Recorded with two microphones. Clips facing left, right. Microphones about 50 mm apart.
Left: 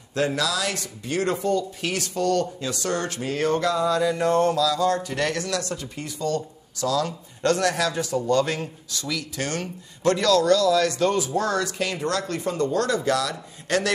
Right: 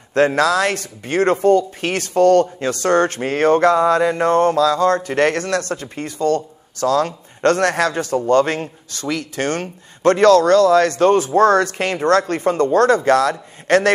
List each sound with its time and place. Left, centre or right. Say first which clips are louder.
0.1 s speech: right 9 dB; right